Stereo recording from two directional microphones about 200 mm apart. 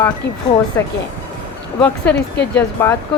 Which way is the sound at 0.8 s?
10° left (ahead or behind).